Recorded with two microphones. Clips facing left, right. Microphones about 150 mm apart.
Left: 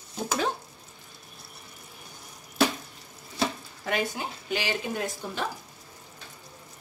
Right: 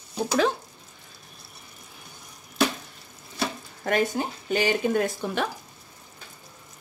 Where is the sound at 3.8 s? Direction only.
45° right (ahead or behind); by 5.4 s 60° right (ahead or behind).